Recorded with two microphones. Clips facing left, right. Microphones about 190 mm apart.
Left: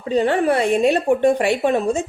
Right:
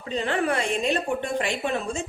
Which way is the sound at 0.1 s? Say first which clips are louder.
Left 8 dB; 40° left (ahead or behind).